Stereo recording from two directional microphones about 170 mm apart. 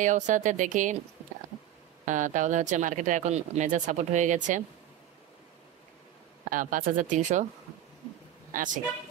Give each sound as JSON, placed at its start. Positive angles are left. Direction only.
{"t": 0.0, "sound": "speech", "side_deg": -50}
{"t": 2.0, "sound": "speech", "side_deg": -50}
{"t": 6.5, "sound": "speech", "side_deg": -50}
{"t": 8.5, "sound": "a woman's voice", "side_deg": -50}